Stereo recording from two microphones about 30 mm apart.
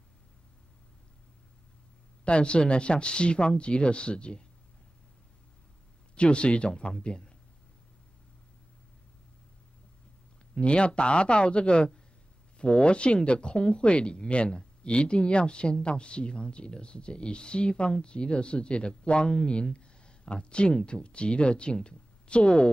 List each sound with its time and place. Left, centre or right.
2.2 s speech: left
6.1 s speech: left
10.5 s speech: left